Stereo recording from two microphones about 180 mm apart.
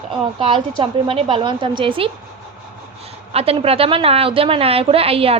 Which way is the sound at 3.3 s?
35° right (ahead or behind).